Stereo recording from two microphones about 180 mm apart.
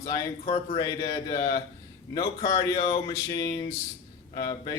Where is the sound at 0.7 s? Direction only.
25° left (ahead or behind).